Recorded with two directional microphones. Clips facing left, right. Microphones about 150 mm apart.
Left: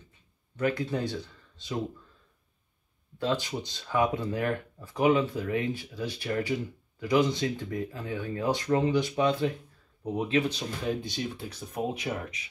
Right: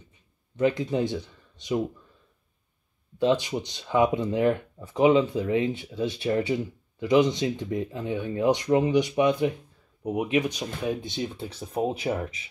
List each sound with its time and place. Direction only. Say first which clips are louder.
0.6 s speech: right 5 dB; 20° right (ahead or behind)
3.2 s speech: right 6 dB; 20° right (ahead or behind)